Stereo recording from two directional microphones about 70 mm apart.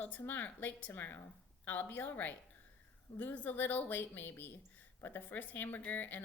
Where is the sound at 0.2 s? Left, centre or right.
Left.